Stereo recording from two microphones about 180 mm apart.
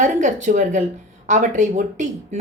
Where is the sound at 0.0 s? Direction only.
45° right (ahead or behind).